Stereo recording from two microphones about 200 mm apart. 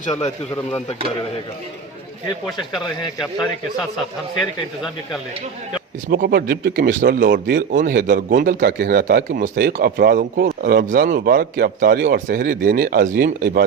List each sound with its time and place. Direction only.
0.0 s speech: 35° left (ahead or behind)
6.1 s speech: 50° right (ahead or behind)